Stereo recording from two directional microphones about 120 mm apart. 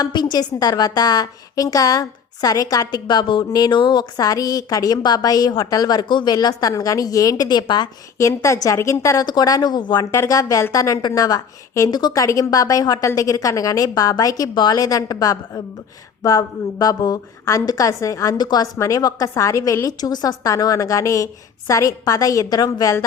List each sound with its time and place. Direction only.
0.0 s a woman's voice: 35° left (ahead or behind)
8.2 s a woman's voice: 25° left (ahead or behind)
10.1 s a woman's voice: 25° left (ahead or behind)